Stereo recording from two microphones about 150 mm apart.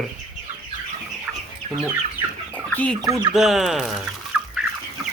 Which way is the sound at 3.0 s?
25° right (ahead or behind).